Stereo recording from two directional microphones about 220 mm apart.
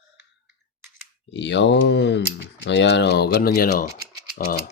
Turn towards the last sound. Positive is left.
turn(degrees=40)  # may be behind; listen again after turning